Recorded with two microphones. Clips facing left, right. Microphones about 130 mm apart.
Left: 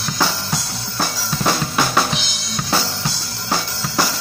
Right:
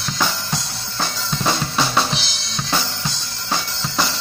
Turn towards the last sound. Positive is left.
turn(degrees=10)  # may be behind; listen again after turning